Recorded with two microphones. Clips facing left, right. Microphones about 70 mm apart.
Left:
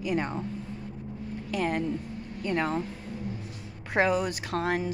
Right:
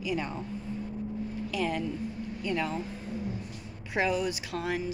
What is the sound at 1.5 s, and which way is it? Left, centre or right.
Speech, left.